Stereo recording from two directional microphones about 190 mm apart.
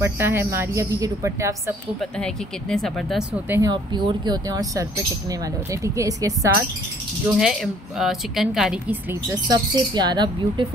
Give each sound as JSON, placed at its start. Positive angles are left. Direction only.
{"t": 0.0, "sound": "a woman's voice", "side_deg": -15}
{"t": 2.0, "sound": "a woman's voice", "side_deg": 5}
{"t": 3.4, "sound": "a woman's voice", "side_deg": -10}
{"t": 3.7, "sound": "a woman's voice", "side_deg": -25}
{"t": 7.3, "sound": "a woman's voice", "side_deg": -5}
{"t": 9.3, "sound": "speech", "side_deg": -20}